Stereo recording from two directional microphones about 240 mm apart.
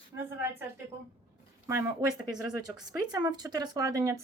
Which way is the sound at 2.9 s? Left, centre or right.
Centre.